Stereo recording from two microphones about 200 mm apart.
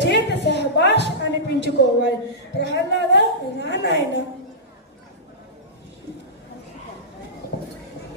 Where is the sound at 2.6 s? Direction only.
60° left (ahead or behind).